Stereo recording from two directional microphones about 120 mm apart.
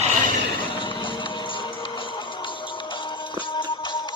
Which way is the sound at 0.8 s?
45° left (ahead or behind).